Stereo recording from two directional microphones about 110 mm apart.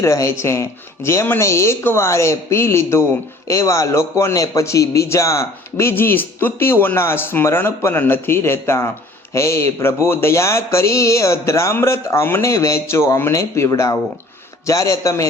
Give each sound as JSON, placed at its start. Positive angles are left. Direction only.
{"t": 0.0, "sound": "a man's voice", "side_deg": 25}